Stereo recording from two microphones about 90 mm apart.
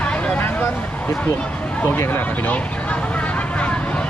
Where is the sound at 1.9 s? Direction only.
25° left (ahead or behind).